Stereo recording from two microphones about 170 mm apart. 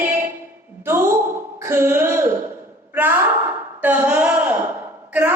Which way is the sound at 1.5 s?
15° right (ahead or behind).